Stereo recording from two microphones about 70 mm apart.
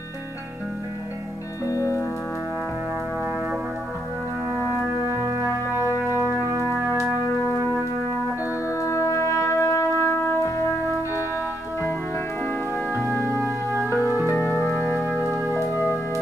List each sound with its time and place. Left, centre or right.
1.7 s music: left
5.2 s music: right
8.6 s brass instrument: left
13.4 s music: right
14.2 s music: left